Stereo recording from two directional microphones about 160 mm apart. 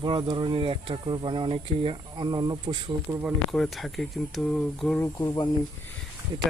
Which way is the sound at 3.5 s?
Centre (ahead or behind).